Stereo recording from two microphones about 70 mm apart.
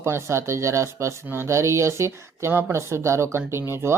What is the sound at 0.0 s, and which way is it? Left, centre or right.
Speech, right.